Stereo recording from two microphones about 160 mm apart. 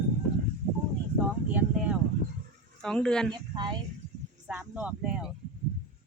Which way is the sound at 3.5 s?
25° right (ahead or behind).